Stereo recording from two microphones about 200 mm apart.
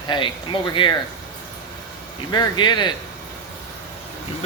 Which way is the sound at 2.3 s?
20° left (ahead or behind).